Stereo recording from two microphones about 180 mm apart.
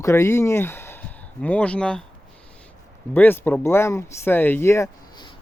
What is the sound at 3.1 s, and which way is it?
Speech, 10° left (ahead or behind).